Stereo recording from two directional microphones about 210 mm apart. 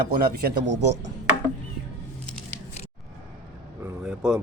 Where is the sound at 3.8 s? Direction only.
5° right (ahead or behind).